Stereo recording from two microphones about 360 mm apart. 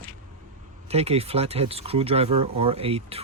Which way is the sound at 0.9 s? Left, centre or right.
Centre.